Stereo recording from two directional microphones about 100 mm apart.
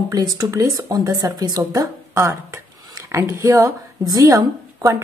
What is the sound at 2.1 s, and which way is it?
Speech, 25° right (ahead or behind).